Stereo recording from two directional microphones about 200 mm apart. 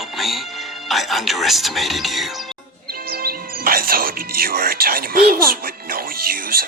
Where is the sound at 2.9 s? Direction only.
50° right (ahead or behind).